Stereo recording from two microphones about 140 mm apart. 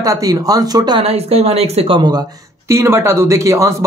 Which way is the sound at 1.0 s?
45° right (ahead or behind).